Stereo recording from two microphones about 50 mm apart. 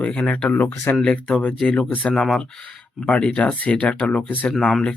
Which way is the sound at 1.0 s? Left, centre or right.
Centre.